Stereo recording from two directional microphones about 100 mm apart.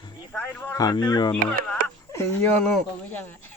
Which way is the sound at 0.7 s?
40° left (ahead or behind).